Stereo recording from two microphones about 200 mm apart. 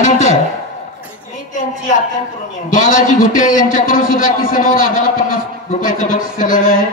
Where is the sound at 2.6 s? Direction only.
40° left (ahead or behind).